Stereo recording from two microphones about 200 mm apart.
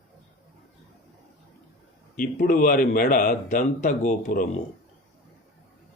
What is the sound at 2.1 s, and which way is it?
Speech, 45° left (ahead or behind).